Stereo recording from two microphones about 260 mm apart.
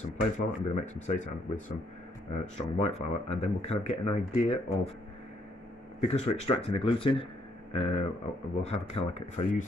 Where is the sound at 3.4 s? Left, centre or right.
Left.